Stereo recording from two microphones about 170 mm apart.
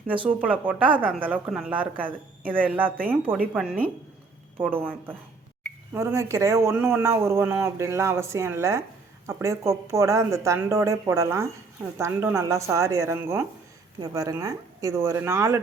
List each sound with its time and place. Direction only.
0.1 s speech: 10° right (ahead or behind)